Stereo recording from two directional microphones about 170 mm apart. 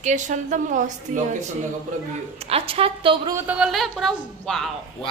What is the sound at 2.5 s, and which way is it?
Speech, 35° right (ahead or behind).